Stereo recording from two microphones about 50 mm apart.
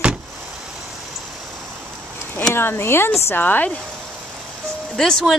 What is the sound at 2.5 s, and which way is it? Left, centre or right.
Speech, left.